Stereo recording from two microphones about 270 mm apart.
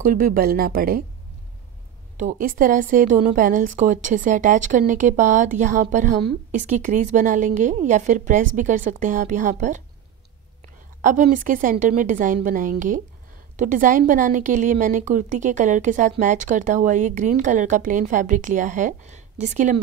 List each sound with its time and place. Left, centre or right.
0.0 s speech: right
2.1 s a woman's voice: right
11.0 s a woman's voice: right